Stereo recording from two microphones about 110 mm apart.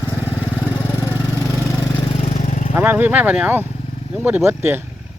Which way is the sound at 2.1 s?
75° left (ahead or behind).